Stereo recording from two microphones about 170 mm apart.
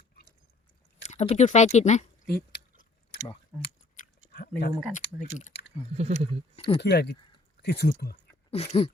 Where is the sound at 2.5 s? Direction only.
75° left (ahead or behind).